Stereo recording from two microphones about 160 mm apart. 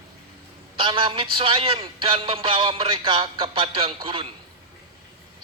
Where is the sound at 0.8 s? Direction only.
30° right (ahead or behind).